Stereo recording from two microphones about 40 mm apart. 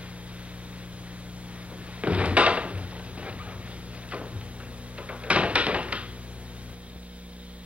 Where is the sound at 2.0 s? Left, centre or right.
Right.